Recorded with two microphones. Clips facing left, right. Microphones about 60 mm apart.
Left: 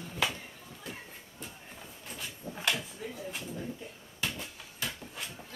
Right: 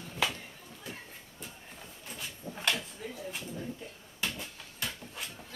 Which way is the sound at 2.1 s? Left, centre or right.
Centre.